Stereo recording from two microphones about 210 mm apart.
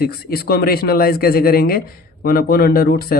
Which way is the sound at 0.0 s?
45° left (ahead or behind).